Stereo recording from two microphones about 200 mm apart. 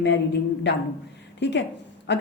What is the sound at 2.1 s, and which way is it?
Speech, 60° left (ahead or behind).